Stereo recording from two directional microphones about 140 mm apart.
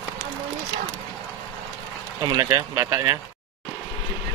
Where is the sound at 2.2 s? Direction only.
25° right (ahead or behind).